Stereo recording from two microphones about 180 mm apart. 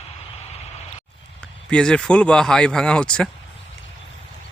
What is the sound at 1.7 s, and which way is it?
Speech, 5° left (ahead or behind).